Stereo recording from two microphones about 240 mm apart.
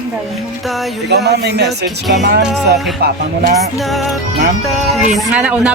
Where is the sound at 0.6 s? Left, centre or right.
Centre.